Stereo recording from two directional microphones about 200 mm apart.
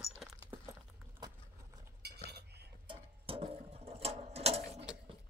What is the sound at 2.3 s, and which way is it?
Cutlery, 55° right (ahead or behind).